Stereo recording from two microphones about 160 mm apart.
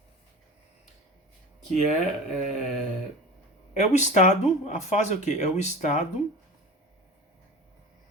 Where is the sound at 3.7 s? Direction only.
45° left (ahead or behind).